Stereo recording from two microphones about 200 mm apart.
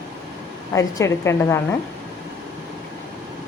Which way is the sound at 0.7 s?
15° left (ahead or behind).